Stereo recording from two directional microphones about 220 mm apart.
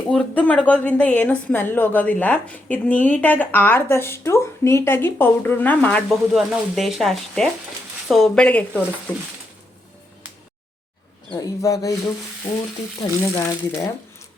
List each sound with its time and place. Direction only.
0.1 s a woman's voice: 5° left (ahead or behind)
11.3 s a woman's voice: 15° left (ahead or behind)
13.0 s a woman's voice: 10° left (ahead or behind)